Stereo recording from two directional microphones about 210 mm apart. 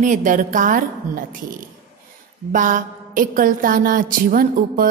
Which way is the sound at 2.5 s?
40° right (ahead or behind).